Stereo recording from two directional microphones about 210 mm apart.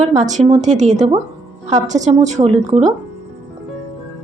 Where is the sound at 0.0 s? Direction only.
35° right (ahead or behind).